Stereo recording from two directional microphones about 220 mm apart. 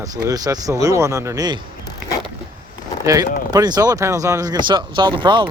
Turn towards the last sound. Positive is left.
turn(degrees=-20)  # may be behind; listen again after turning